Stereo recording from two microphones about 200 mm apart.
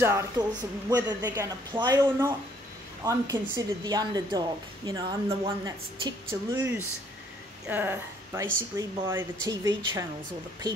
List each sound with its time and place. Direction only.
0.0 s a woman's voice: 15° right (ahead or behind)